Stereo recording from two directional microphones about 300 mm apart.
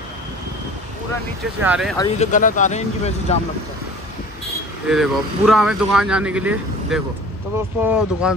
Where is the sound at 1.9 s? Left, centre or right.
Centre.